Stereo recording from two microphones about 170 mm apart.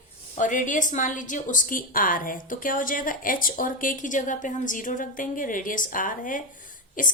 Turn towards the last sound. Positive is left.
turn(degrees=50)  # may be behind; listen again after turning